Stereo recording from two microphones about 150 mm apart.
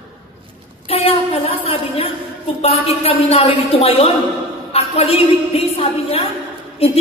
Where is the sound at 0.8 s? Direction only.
40° left (ahead or behind).